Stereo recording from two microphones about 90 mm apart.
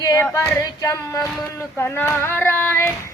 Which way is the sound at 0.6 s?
40° left (ahead or behind).